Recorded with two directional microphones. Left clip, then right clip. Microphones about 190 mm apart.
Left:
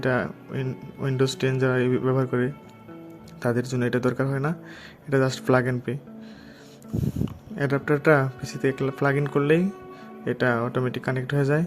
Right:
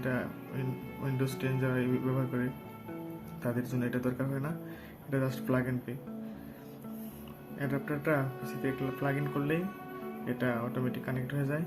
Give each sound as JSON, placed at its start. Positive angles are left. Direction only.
{"t": 0.0, "sound": "speech", "side_deg": 50}
{"t": 7.6, "sound": "speech", "side_deg": 55}